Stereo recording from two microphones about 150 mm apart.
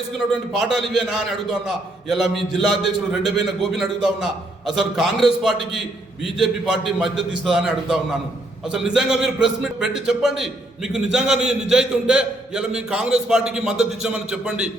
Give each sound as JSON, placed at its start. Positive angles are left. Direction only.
{"t": 0.6, "sound": "a man's voice", "side_deg": 0}